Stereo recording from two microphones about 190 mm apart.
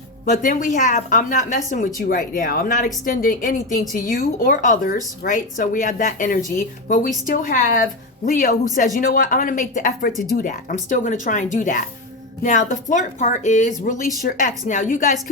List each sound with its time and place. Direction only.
0.3 s a woman's voice: 45° left (ahead or behind)